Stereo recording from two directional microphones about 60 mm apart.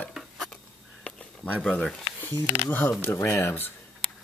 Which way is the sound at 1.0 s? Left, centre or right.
Centre.